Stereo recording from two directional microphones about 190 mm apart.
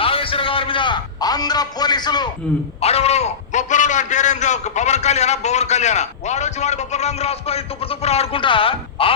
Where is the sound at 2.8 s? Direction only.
35° left (ahead or behind).